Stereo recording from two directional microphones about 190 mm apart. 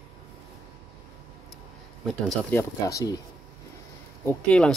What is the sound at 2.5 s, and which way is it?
Speech, 15° left (ahead or behind).